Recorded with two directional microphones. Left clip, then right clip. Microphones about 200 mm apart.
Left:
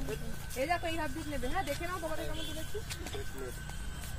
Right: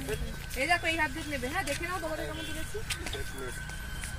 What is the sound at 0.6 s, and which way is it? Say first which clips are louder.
Speech: right 6 dB; 25° right (ahead or behind).